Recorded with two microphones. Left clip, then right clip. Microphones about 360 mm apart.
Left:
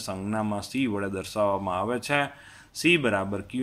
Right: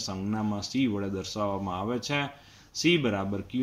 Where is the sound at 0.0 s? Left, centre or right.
Left.